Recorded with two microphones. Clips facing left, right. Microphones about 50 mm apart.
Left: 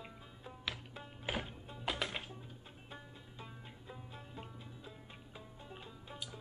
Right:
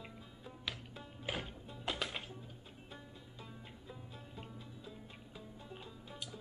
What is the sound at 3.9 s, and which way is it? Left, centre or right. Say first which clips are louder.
Music: left 2 dB; centre.